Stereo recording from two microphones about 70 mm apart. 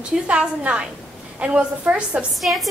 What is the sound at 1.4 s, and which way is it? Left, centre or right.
Speech, centre.